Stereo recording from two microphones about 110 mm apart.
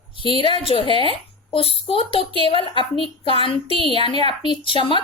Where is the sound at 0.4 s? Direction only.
55° left (ahead or behind).